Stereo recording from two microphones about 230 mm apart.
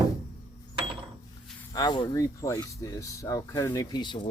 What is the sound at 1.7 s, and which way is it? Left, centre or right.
Speech, centre.